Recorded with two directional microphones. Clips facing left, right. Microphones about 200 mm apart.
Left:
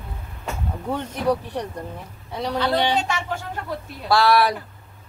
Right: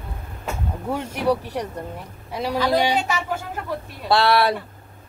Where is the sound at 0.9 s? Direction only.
10° right (ahead or behind).